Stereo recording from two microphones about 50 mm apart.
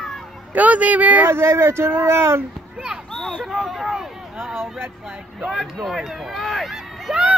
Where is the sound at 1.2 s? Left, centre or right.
Right.